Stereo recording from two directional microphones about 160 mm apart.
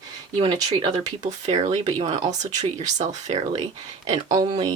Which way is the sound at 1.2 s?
45° right (ahead or behind).